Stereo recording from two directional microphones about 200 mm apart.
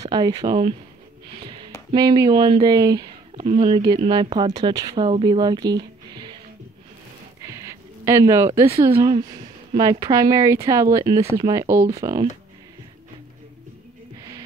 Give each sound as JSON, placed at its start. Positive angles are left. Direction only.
{"t": 0.0, "sound": "speech", "side_deg": -20}
{"t": 1.4, "sound": "a sound", "side_deg": -25}
{"t": 1.9, "sound": "speech", "side_deg": -20}
{"t": 7.4, "sound": "speech", "side_deg": -15}